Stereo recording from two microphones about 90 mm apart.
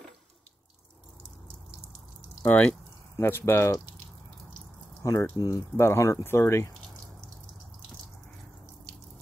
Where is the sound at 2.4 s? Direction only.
15° left (ahead or behind).